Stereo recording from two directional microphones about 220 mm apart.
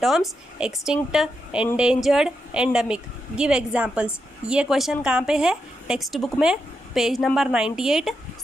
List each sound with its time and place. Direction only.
0.0 s speech: centre (ahead or behind)